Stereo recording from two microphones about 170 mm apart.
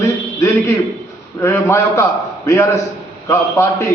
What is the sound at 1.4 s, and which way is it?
Speech, 15° left (ahead or behind).